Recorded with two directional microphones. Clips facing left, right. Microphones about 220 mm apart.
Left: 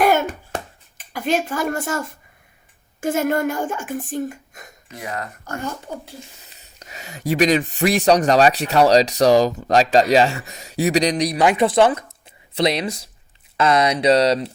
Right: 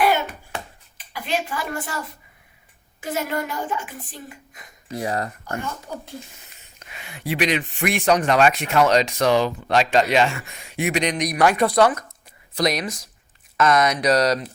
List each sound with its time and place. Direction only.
0.0 s a sound: 45° left (ahead or behind)
3.0 s speech: 50° left (ahead or behind)
4.9 s speech: 35° right (ahead or behind)
5.9 s speech: 25° left (ahead or behind)
6.6 s speech: 40° left (ahead or behind)
11.3 s speech: 20° left (ahead or behind)